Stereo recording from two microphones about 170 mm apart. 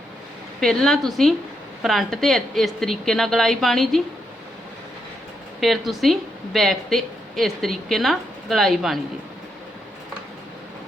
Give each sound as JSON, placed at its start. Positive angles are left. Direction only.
{"t": 0.6, "sound": "a woman's voice", "side_deg": 5}
{"t": 5.5, "sound": "a woman's voice", "side_deg": 0}